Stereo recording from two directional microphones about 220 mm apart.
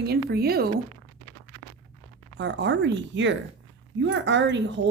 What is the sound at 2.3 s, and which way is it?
Speech, 55° right (ahead or behind).